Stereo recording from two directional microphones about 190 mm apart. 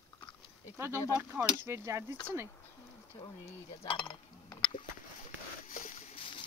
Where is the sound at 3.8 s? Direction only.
25° left (ahead or behind).